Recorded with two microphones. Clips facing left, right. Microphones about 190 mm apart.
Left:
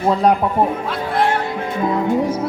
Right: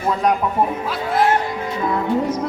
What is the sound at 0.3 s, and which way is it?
Speech, 30° left (ahead or behind).